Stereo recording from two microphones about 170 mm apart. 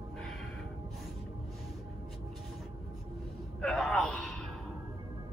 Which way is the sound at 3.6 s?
Centre (ahead or behind).